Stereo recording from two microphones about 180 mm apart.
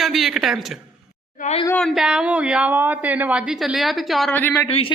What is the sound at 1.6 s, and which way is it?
A woman's voice, 5° left (ahead or behind).